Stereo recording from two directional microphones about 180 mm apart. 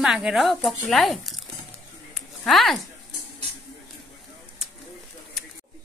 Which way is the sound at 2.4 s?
Centre (ahead or behind).